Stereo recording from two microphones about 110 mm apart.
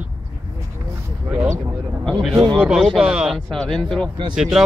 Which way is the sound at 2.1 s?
5° right (ahead or behind).